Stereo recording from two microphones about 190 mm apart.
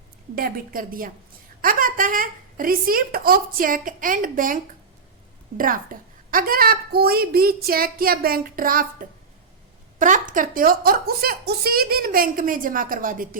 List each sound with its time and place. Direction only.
0.3 s a woman's voice: 50° right (ahead or behind)